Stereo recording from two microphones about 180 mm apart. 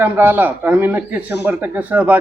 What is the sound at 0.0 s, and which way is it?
Speech, 10° right (ahead or behind).